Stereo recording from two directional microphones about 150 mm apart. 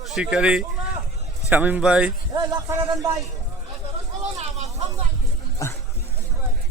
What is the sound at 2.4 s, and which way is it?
Speech, 25° right (ahead or behind).